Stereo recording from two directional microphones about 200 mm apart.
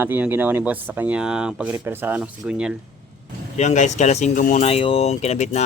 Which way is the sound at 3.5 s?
35° left (ahead or behind).